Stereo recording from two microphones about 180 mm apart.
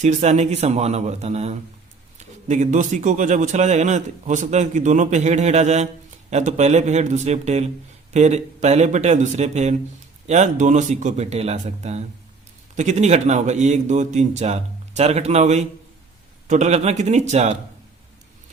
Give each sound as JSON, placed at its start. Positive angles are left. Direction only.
{"t": 0.0, "sound": "a man's voice", "side_deg": -40}